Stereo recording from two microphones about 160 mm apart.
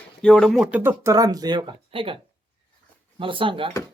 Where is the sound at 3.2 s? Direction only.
35° right (ahead or behind).